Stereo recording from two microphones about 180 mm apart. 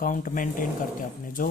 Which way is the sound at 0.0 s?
50° left (ahead or behind).